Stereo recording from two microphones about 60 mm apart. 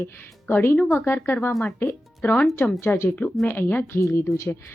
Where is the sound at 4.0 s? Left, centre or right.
Left.